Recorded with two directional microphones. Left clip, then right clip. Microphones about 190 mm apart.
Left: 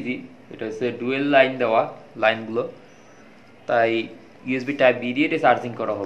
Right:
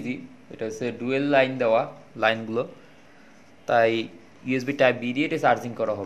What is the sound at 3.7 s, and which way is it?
A man's voice, 60° right (ahead or behind).